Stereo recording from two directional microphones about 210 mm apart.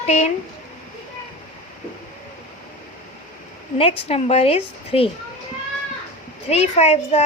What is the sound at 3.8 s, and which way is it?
A woman's voice, 25° left (ahead or behind).